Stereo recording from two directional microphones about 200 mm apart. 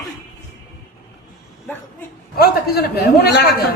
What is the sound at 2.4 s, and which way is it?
Speech, 50° left (ahead or behind).